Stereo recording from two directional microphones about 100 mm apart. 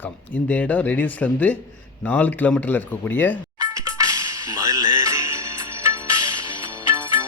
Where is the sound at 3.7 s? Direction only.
35° right (ahead or behind).